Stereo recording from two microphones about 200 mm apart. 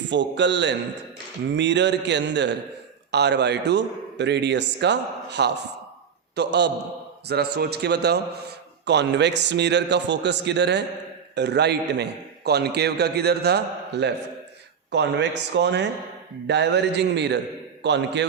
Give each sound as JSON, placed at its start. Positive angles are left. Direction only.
{"t": 0.1, "sound": "a man's voice", "side_deg": -60}